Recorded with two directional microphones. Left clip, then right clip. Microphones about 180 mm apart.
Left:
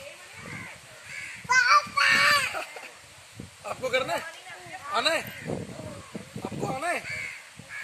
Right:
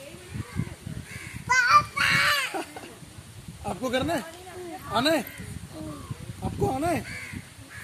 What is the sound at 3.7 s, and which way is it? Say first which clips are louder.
Speech: even; 20° right (ahead or behind).